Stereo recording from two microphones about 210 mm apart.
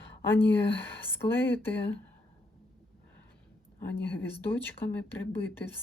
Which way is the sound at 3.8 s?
10° left (ahead or behind).